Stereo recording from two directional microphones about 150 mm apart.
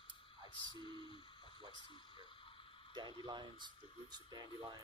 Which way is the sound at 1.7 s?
35° left (ahead or behind).